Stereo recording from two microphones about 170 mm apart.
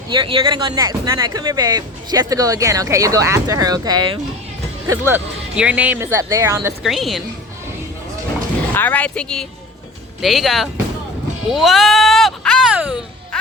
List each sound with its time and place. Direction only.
0.1 s speech: 30° right (ahead or behind)
4.9 s speech: 10° right (ahead or behind)
6.8 s speech: centre (ahead or behind)
8.7 s speech: 10° left (ahead or behind)
11.4 s music: centre (ahead or behind)